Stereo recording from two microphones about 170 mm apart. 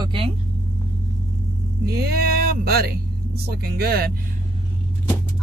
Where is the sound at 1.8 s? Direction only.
65° right (ahead or behind).